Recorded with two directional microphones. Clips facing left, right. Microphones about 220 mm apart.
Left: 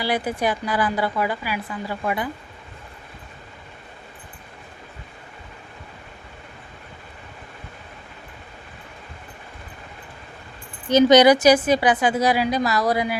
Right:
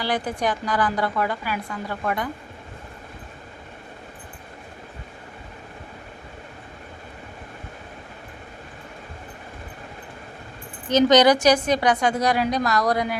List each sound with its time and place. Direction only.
0.0 s a woman's voice: 10° left (ahead or behind)
10.8 s a woman's voice: 10° left (ahead or behind)